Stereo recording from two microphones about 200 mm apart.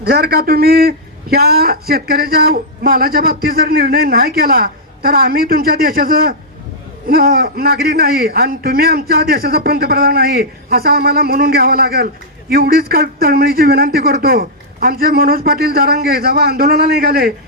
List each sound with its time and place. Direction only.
0.0 s a man's voice: 50° right (ahead or behind)